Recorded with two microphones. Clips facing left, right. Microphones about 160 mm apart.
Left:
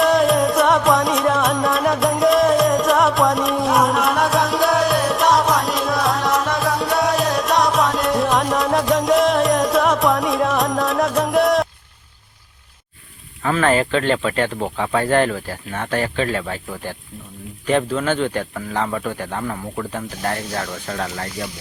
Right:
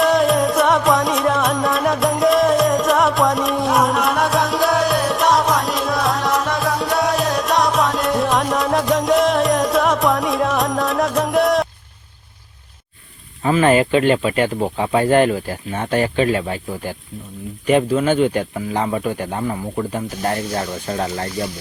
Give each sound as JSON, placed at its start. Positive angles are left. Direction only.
{"t": 0.0, "sound": "music", "side_deg": 0}
{"t": 13.4, "sound": "speech", "side_deg": -15}